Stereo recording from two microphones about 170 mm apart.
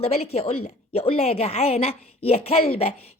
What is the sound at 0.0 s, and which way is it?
A woman's voice, 35° left (ahead or behind).